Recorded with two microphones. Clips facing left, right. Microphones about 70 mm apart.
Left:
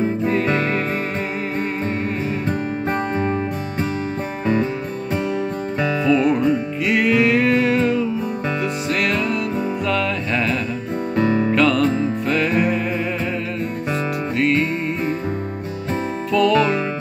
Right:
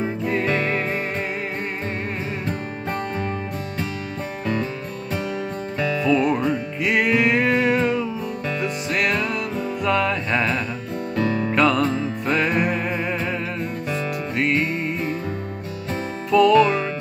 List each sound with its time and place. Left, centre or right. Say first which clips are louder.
2.9 s music: left 4 dB; left
5.8 s music: left 2 dB; centre
6.8 s music: left 1 dB; right
11.1 s music: left 4 dB; centre
11.5 s music: left 2 dB; right
16.3 s music: right 2 dB; right